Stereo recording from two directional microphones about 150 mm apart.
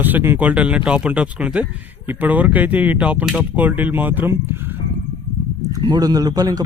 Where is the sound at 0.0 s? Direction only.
15° right (ahead or behind).